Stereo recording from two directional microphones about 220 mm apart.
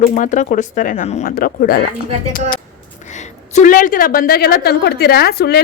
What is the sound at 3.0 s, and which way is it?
A woman's voice, 30° left (ahead or behind).